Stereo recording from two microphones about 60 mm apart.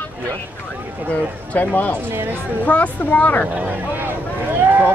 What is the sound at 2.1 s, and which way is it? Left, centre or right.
Speech, right.